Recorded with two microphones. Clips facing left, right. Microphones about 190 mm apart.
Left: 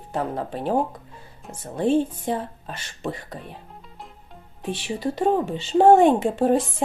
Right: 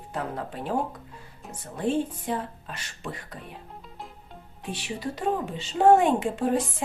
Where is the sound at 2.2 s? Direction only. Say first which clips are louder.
Left 4 dB; 30° left (ahead or behind).